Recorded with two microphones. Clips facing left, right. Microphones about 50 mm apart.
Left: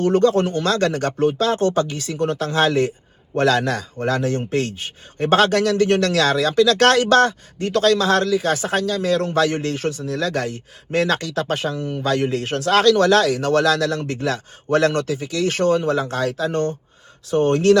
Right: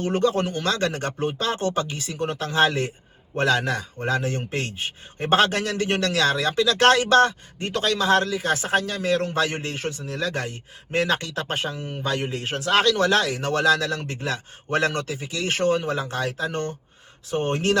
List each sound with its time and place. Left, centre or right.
0.0 s a man's voice: right